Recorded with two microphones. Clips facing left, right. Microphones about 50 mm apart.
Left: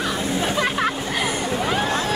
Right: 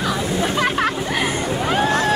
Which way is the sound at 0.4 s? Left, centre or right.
Right.